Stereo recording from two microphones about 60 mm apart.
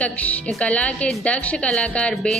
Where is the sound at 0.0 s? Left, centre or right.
Left.